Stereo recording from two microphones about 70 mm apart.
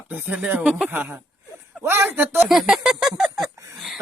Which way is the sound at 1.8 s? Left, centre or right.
Right.